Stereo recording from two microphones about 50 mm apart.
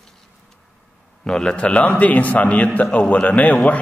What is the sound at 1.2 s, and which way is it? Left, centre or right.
A man's voice, centre.